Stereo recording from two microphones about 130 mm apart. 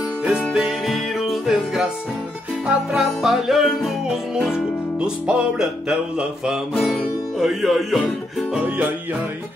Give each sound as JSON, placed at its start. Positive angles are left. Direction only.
{"t": 0.2, "sound": "music", "side_deg": -5}
{"t": 5.0, "sound": "music", "side_deg": -5}
{"t": 8.6, "sound": "music", "side_deg": -10}